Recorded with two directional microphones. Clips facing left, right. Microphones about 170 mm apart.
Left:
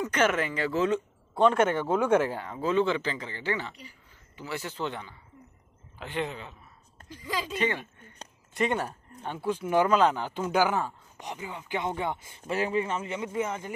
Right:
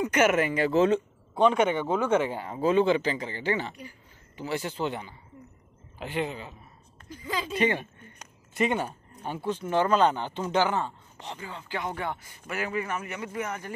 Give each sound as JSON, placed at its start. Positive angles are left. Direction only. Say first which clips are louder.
{"t": 0.0, "sound": "speech", "louder": "right 3 dB", "side_deg": -10}
{"t": 0.7, "sound": "a man's voice", "louder": "right 4 dB", "side_deg": -25}
{"t": 1.3, "sound": "speech", "louder": "even", "side_deg": 0}
{"t": 2.5, "sound": "a man's voice", "louder": "right 4 dB", "side_deg": -15}
{"t": 4.7, "sound": "speech", "louder": "right 3 dB", "side_deg": -10}
{"t": 8.5, "sound": "speech", "louder": "right 1 dB", "side_deg": -5}